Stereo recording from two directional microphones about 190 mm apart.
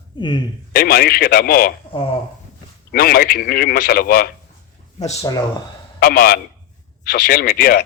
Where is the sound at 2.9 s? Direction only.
50° left (ahead or behind).